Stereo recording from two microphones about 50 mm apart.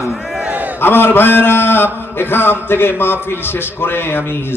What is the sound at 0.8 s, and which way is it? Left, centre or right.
A man's voice, left.